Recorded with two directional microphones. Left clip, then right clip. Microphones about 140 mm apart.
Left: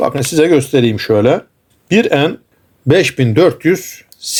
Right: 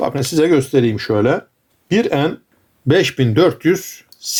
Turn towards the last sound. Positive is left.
turn(degrees=25)  # may be behind; listen again after turning